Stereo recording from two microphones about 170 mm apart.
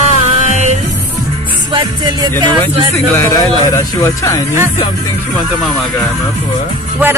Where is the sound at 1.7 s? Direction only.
25° right (ahead or behind).